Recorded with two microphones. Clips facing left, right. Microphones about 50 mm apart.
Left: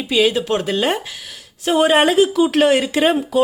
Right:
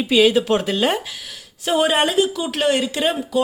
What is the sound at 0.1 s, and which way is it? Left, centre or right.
Speech, centre.